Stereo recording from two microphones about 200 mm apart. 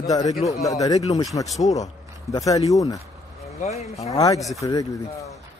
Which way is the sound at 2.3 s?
15° left (ahead or behind).